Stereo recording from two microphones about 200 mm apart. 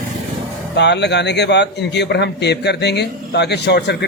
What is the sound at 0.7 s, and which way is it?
A man's voice, 60° left (ahead or behind).